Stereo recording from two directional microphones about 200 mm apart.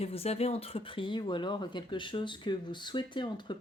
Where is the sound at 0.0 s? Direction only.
30° left (ahead or behind).